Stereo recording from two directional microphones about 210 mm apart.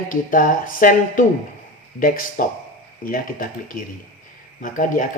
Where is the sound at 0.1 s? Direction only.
40° left (ahead or behind).